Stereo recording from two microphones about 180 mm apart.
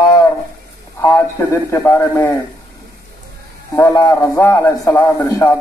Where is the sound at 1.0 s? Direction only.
15° left (ahead or behind).